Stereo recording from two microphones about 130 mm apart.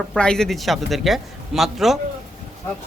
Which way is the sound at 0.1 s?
5° left (ahead or behind).